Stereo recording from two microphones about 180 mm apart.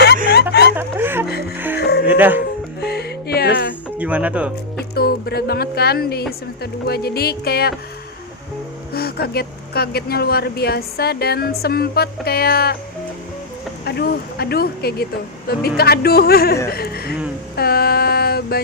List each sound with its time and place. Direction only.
0.8 s speech: 10° right (ahead or behind)
1.5 s music: 10° right (ahead or behind)
1.8 s music: 65° left (ahead or behind)
2.0 s speech: 10° right (ahead or behind)
2.8 s music: 60° left (ahead or behind)
3.9 s speech: 10° right (ahead or behind)
4.9 s speech: 60° left (ahead or behind)
8.9 s speech: 60° left (ahead or behind)
13.8 s speech: 60° left (ahead or behind)
17.6 s a sound: 60° left (ahead or behind)